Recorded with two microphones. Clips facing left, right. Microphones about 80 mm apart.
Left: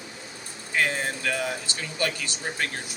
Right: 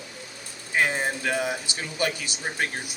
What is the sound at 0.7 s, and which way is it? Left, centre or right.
Speech, centre.